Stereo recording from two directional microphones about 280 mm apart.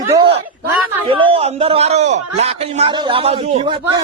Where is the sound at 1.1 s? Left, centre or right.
Centre.